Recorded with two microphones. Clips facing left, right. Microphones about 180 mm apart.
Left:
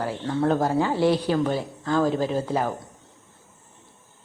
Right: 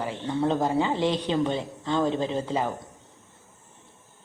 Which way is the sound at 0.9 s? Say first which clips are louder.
Left 4 dB; 10° left (ahead or behind).